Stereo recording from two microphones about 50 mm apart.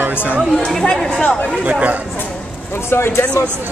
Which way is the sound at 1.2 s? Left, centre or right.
Left.